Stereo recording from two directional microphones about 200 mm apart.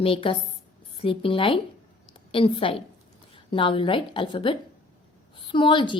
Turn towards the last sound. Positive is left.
turn(degrees=25)  # may be behind; listen again after turning